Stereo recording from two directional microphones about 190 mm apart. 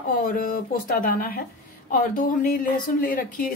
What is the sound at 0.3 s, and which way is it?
A woman's voice, 50° left (ahead or behind).